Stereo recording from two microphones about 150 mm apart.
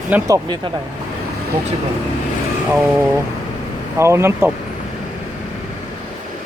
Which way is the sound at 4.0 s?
20° right (ahead or behind).